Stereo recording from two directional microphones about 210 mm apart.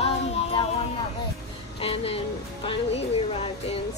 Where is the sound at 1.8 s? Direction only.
25° left (ahead or behind).